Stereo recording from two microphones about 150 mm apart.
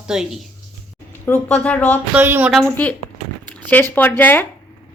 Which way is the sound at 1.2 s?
10° left (ahead or behind).